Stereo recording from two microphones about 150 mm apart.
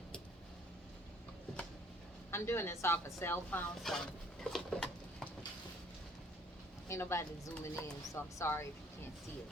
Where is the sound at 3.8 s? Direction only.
5° left (ahead or behind).